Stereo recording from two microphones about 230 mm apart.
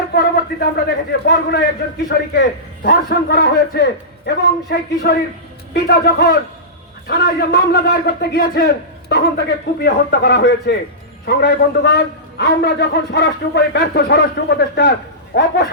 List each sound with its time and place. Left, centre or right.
0.1 s a man's voice: left